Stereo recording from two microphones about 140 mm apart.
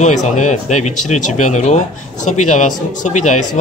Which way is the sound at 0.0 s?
60° left (ahead or behind).